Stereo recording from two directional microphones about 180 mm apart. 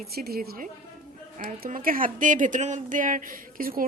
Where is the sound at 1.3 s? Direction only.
45° right (ahead or behind).